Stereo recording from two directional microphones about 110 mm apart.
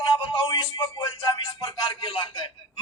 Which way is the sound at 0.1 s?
45° left (ahead or behind).